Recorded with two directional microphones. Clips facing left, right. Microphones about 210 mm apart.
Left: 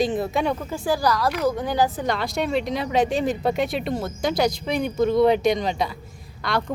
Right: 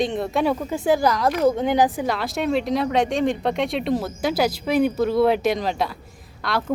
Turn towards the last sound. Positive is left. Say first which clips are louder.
# even
turn(degrees=0)  # may be behind; listen again after turning